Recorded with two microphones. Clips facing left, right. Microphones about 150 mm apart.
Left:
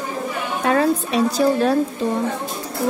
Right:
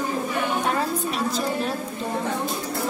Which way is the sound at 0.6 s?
80° left.